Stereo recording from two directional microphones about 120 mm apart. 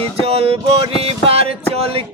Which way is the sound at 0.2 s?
55° right (ahead or behind).